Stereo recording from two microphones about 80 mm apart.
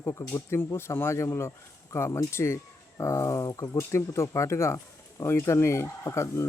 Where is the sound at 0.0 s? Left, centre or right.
Left.